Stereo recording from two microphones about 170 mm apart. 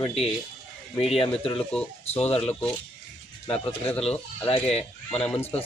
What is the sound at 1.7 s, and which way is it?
Speech, 5° left (ahead or behind).